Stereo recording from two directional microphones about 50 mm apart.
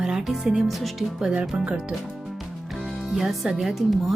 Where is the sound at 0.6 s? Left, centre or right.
Centre.